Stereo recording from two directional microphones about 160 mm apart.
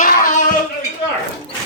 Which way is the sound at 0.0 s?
55° left (ahead or behind).